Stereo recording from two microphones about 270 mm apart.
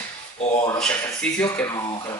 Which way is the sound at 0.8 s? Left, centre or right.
Centre.